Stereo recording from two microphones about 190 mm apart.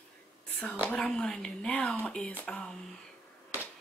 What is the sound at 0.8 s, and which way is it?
Speech, 5° left (ahead or behind).